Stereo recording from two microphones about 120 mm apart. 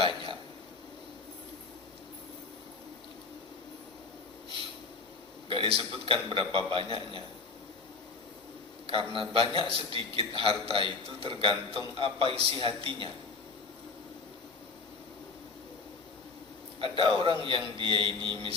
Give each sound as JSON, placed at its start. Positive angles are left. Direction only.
{"t": 0.0, "sound": "a sound", "side_deg": -50}
{"t": 5.5, "sound": "a man's voice", "side_deg": -50}
{"t": 8.9, "sound": "a man's voice", "side_deg": -45}
{"t": 16.8, "sound": "a man's voice", "side_deg": -45}